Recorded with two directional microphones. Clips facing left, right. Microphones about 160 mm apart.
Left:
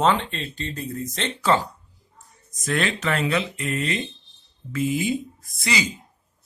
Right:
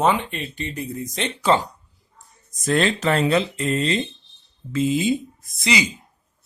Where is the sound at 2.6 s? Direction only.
30° right (ahead or behind).